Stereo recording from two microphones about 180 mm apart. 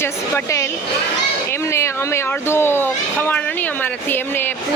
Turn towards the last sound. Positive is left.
turn(degrees=10)  # may be behind; listen again after turning